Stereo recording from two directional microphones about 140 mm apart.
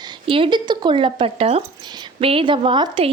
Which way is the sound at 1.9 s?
30° right (ahead or behind).